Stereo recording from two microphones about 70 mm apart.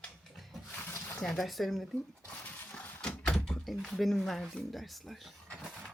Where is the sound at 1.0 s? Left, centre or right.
Left.